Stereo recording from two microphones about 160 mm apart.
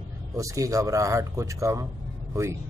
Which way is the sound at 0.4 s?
20° right (ahead or behind).